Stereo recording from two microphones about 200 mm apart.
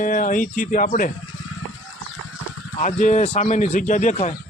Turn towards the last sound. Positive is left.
turn(degrees=35)  # may be behind; listen again after turning